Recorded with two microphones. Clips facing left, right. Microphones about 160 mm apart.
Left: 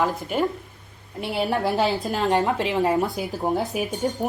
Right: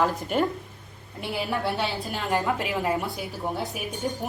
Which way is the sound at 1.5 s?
40° left (ahead or behind).